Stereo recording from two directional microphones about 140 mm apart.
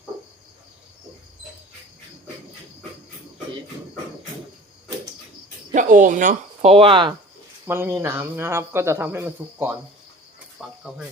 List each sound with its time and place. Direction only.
5.7 s speech: 70° right (ahead or behind)
6.6 s speech: 45° right (ahead or behind)
7.7 s a man's voice: 15° right (ahead or behind)
10.8 s speech: 5° right (ahead or behind)